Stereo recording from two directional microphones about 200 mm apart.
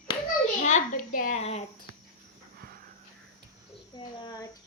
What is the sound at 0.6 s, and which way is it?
A child's voice, 35° left (ahead or behind).